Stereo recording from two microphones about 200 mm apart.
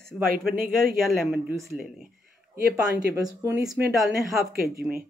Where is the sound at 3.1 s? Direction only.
15° right (ahead or behind).